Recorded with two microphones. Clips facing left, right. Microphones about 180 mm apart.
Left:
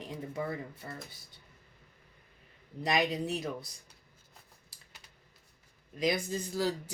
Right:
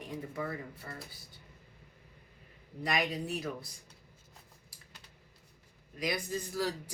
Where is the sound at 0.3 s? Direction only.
25° left (ahead or behind).